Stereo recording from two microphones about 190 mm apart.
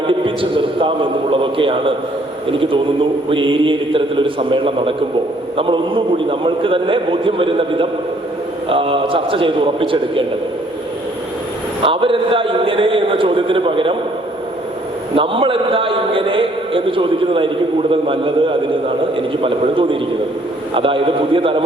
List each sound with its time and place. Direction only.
0.1 s a man's voice: 25° right (ahead or behind)
11.8 s a man's voice: 30° right (ahead or behind)
15.1 s a man's voice: 30° right (ahead or behind)